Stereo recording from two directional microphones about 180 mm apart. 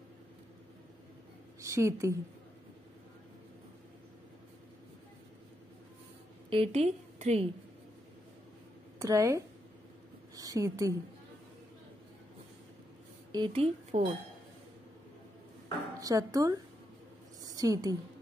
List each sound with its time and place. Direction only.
1.6 s a woman's voice: 15° right (ahead or behind)
6.5 s a woman's voice: 35° right (ahead or behind)
9.0 s a woman's voice: 15° right (ahead or behind)
13.5 s speech: 35° right (ahead or behind)
16.0 s a woman's voice: 20° right (ahead or behind)